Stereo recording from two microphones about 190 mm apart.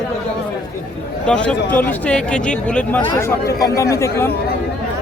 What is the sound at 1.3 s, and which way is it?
Speech, 5° left (ahead or behind).